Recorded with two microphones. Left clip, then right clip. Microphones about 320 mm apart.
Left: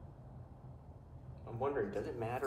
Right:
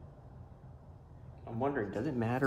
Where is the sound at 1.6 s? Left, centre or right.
Right.